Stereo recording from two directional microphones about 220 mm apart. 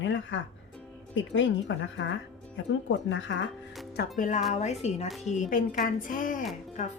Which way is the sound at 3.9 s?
40° left (ahead or behind).